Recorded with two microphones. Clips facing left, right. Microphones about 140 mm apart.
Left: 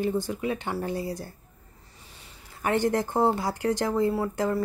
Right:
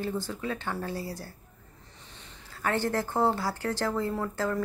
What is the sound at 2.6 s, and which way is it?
Speech, 15° left (ahead or behind).